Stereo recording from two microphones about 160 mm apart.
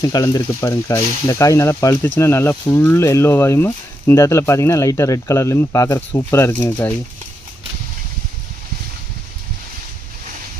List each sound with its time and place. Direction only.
0.0 s speech: 25° left (ahead or behind)